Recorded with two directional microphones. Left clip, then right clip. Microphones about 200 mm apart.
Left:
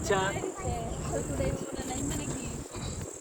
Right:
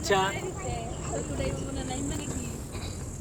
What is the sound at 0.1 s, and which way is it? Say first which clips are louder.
Speech: right 4 dB; 40° right (ahead or behind).